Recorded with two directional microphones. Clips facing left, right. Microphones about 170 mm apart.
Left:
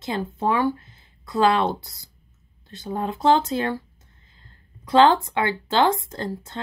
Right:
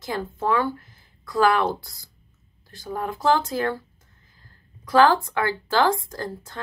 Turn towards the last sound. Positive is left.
turn(degrees=25)  # may be behind; listen again after turning